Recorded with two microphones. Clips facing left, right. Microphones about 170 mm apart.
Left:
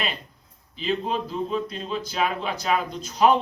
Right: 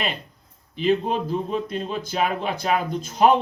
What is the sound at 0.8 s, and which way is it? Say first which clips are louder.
A man's voice: right 5 dB; 50° right (ahead or behind).